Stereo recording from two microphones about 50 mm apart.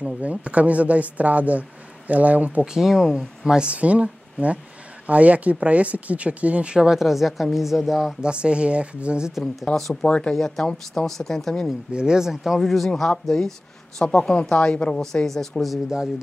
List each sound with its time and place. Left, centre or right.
0.0 s speech: right
2.6 s speech: centre
3.4 s speech: centre
6.8 s speech: centre
8.2 s speech: centre
9.7 s speech: left
10.3 s speech: centre
11.9 s speech: centre
12.5 s speech: centre
15.0 s speech: centre